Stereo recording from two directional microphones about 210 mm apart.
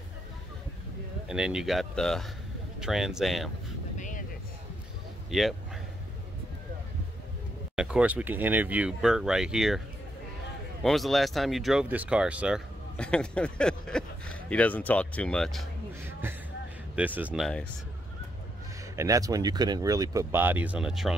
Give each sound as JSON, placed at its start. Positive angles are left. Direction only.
{"t": 1.2, "sound": "speech", "side_deg": -5}
{"t": 7.7, "sound": "speech", "side_deg": -5}
{"t": 10.8, "sound": "speech", "side_deg": 0}
{"t": 16.9, "sound": "speech", "side_deg": -5}
{"t": 18.9, "sound": "speech", "side_deg": -15}